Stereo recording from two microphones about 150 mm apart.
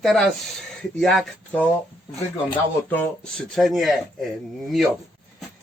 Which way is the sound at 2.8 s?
10° left (ahead or behind).